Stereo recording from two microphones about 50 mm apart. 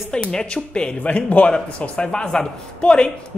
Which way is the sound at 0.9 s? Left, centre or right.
Left.